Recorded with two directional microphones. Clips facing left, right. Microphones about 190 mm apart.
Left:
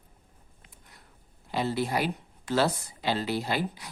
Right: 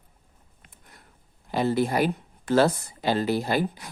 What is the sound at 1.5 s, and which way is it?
Speech, 50° right (ahead or behind).